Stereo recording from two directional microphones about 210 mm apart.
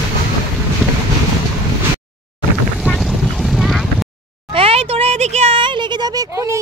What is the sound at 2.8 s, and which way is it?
Boat, centre (ahead or behind).